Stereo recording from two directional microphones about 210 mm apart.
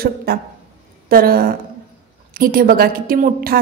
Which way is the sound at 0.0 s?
45° right (ahead or behind).